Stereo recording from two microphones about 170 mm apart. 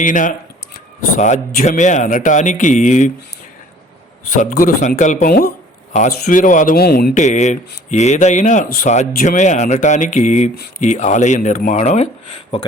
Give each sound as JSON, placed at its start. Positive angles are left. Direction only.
{"t": 0.0, "sound": "speech", "side_deg": 50}
{"t": 4.5, "sound": "speech", "side_deg": 55}
{"t": 5.9, "sound": "speech", "side_deg": 45}